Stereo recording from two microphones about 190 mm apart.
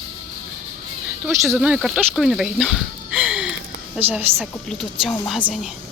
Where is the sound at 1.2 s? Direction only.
15° right (ahead or behind).